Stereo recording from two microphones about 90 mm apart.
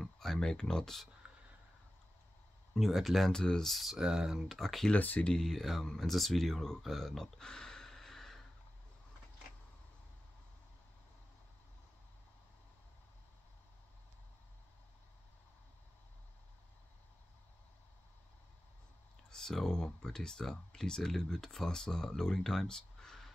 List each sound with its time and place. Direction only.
0.0 s speech: 5° left (ahead or behind)
1.2 s a sound: 15° right (ahead or behind)
2.7 s speech: centre (ahead or behind)
4.9 s speech: 15° left (ahead or behind)
19.3 s speech: 5° left (ahead or behind)